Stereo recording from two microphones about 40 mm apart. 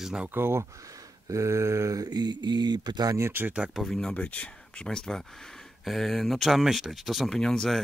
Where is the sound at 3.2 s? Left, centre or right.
Right.